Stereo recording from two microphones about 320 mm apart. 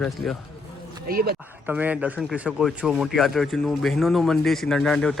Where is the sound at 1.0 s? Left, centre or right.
Right.